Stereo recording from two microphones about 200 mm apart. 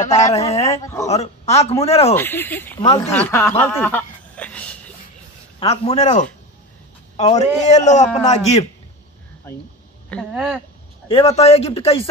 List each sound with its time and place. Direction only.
0.0 s speech: 15° left (ahead or behind)
0.3 s speech: 30° left (ahead or behind)
2.1 s speech: 10° left (ahead or behind)
5.6 s a man's voice: 30° left (ahead or behind)
10.1 s speech: 5° left (ahead or behind)
11.1 s speech: 30° left (ahead or behind)